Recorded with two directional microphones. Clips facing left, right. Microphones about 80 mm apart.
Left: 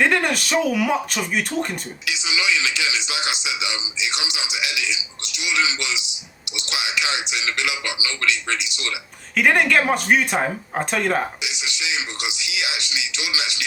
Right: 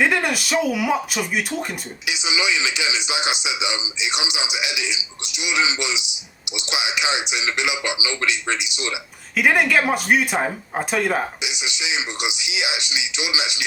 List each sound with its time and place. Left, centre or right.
0.0 s speech: centre
2.0 s a man's voice: right
9.3 s speech: centre
11.4 s a man's voice: right